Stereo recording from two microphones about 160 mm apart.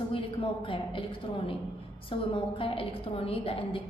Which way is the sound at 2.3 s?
35° left (ahead or behind).